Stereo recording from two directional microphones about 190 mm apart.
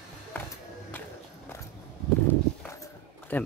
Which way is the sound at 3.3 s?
10° left (ahead or behind).